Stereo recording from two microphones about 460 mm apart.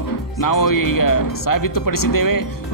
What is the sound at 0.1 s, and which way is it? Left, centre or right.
Speech, left.